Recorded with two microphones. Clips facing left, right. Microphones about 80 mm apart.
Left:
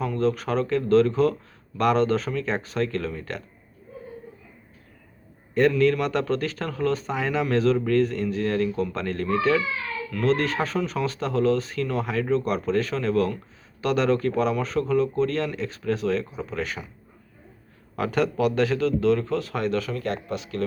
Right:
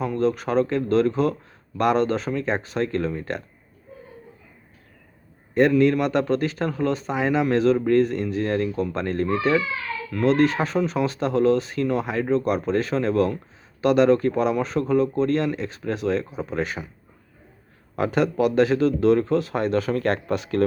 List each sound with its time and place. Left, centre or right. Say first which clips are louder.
0.0 s a man's voice: right 2 dB; centre
5.5 s a man's voice: right 2 dB; centre
17.9 s a man's voice: right 2 dB; centre
19.9 s speech: right 6 dB; right